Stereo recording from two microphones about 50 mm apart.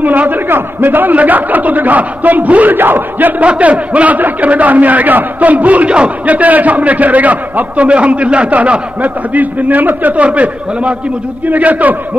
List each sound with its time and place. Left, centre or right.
0.0 s a man's voice: right
3.4 s a man's voice: right